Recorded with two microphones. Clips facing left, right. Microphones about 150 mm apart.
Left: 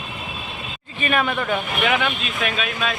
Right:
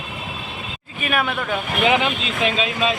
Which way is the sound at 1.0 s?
5° right (ahead or behind).